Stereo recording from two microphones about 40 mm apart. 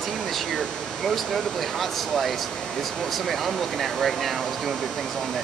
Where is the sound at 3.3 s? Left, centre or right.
Centre.